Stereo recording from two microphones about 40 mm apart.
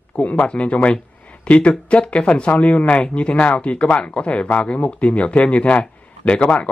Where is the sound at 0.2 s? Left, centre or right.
Left.